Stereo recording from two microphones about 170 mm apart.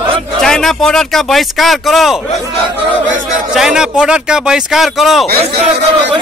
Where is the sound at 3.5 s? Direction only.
5° right (ahead or behind).